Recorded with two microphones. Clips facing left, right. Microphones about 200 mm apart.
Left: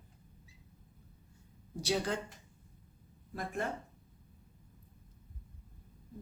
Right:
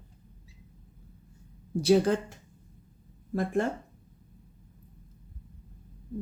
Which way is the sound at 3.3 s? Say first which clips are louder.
Right 11 dB; 50° right (ahead or behind).